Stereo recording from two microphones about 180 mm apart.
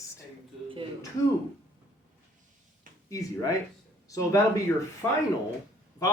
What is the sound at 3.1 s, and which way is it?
A man's voice, 20° left (ahead or behind).